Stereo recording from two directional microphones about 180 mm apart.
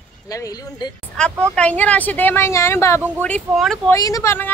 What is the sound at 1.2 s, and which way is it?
A woman's voice, 5° left (ahead or behind).